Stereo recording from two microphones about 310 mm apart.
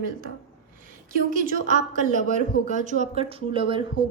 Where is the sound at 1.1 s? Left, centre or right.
Right.